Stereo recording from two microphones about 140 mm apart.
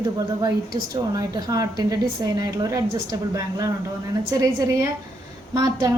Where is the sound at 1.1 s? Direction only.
25° right (ahead or behind).